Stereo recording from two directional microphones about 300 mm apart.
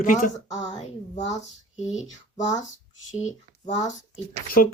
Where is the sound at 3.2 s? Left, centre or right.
Left.